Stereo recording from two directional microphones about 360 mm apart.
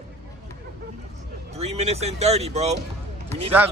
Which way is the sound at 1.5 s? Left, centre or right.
Centre.